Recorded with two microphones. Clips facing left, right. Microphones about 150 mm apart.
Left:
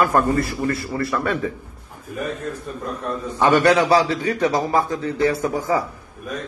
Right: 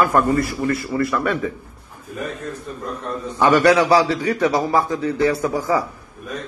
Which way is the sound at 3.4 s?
25° left (ahead or behind).